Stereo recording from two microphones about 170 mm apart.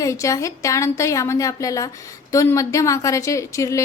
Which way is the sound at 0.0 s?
20° left (ahead or behind).